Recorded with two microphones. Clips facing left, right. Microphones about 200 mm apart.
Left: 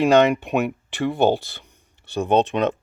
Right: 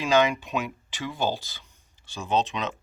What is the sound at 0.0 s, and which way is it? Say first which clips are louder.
Speech: left 7 dB; 60° left (ahead or behind).